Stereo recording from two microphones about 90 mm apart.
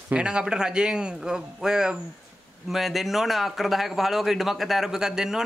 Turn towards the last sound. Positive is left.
turn(degrees=-5)  # may be behind; listen again after turning